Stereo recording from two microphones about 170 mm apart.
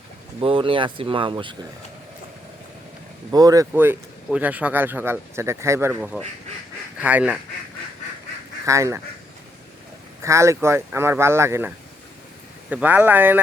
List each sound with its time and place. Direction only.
0.3 s speech: 30° right (ahead or behind)
3.3 s speech: 20° right (ahead or behind)
3.7 s speech: 10° right (ahead or behind)
8.6 s speech: 20° right (ahead or behind)
10.2 s speech: 15° right (ahead or behind)
12.7 s speech: 10° right (ahead or behind)